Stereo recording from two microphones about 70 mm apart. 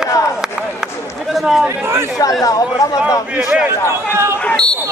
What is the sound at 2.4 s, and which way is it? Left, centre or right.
Speech, left.